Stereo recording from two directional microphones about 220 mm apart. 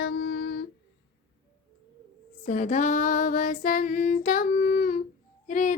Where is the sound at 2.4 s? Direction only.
35° left (ahead or behind).